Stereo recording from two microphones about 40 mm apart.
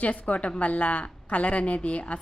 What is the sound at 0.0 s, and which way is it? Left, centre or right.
A woman's voice, left.